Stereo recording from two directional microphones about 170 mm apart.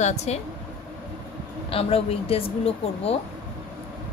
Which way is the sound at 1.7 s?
35° left (ahead or behind).